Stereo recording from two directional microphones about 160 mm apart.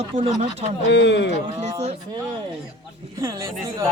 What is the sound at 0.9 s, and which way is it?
Speech, 90° left.